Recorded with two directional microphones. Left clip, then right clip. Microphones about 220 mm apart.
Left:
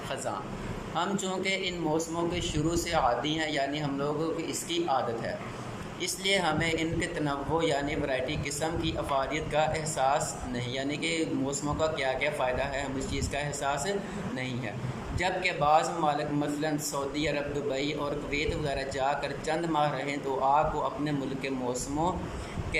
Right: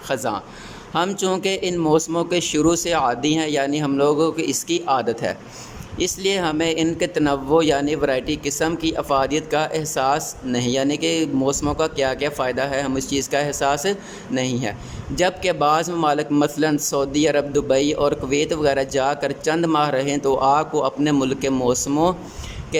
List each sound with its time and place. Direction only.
0.1 s a man's voice: 50° right (ahead or behind)